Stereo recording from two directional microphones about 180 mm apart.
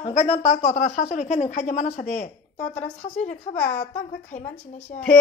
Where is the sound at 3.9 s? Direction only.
40° left (ahead or behind).